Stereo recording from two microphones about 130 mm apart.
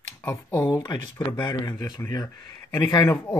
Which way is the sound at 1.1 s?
30° left (ahead or behind).